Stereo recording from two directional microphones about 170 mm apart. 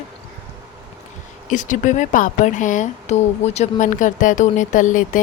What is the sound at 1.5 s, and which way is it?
Speech, 45° left (ahead or behind).